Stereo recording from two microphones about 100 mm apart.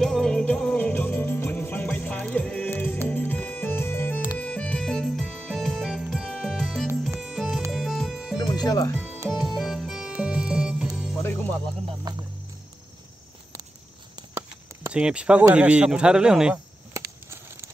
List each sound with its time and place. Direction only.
0.0 s music: 5° left (ahead or behind)
8.4 s music: 40° left (ahead or behind)
9.3 s music: centre (ahead or behind)
12.1 s music: 40° right (ahead or behind)
14.9 s a man's voice: 10° right (ahead or behind)
16.9 s a sound: 25° right (ahead or behind)